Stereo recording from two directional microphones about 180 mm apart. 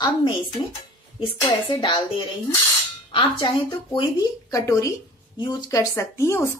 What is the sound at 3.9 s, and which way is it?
A woman's voice, 20° left (ahead or behind).